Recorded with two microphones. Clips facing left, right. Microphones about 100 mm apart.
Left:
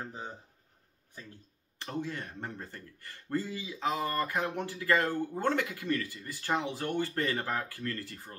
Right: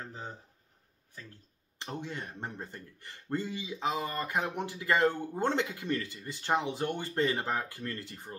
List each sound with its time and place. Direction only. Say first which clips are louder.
1.8 s speech: left 2 dB; 20° right (ahead or behind)